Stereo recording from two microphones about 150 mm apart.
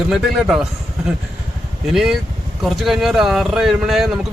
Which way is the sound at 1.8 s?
Centre (ahead or behind).